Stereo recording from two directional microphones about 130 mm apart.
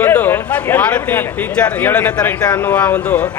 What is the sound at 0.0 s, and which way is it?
A man's voice, 15° left (ahead or behind).